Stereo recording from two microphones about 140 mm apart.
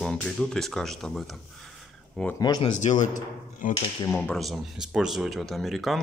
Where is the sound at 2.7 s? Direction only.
60° left (ahead or behind).